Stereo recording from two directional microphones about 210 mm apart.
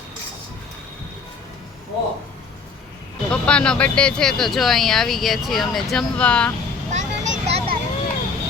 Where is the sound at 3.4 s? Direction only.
5° left (ahead or behind).